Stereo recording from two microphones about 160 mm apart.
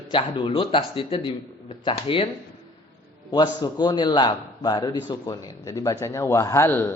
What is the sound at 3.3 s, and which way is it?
A man's voice, 25° left (ahead or behind).